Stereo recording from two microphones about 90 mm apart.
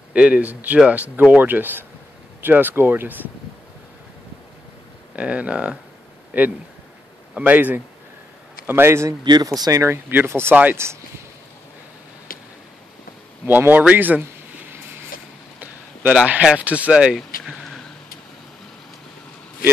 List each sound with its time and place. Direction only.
0.1 s speech: 15° right (ahead or behind)
5.1 s speech: 15° right (ahead or behind)
9.2 s speech: 45° right (ahead or behind)
10.0 s speech: 25° right (ahead or behind)
13.5 s speech: 20° right (ahead or behind)
15.6 s a sound: 20° right (ahead or behind)
16.4 s speech: 15° right (ahead or behind); by 17.8 s 5° left (ahead or behind)